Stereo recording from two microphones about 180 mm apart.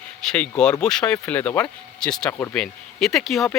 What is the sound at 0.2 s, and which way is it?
Speech, 5° left (ahead or behind).